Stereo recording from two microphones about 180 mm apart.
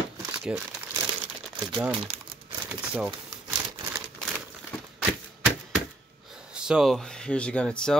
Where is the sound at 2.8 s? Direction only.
5° right (ahead or behind).